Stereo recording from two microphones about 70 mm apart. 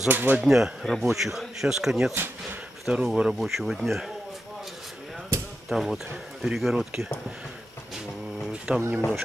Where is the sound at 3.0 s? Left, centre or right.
Centre.